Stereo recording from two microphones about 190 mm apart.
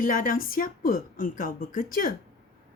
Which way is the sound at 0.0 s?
45° left (ahead or behind).